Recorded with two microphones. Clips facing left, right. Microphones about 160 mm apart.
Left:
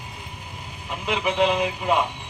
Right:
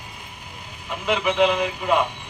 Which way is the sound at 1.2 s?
25° left (ahead or behind).